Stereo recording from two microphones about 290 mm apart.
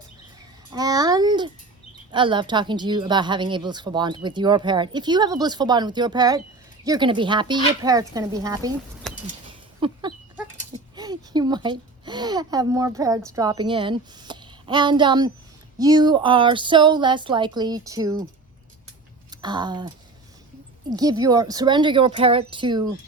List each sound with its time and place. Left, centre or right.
0.7 s babbling: centre
2.1 s speech: centre
9.0 s bird: centre
9.5 s a sound: centre
10.7 s a child's voice: centre
19.3 s speech: centre
20.9 s speech: centre